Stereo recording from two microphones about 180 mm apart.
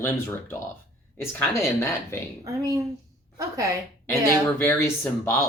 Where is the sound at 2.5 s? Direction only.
20° right (ahead or behind).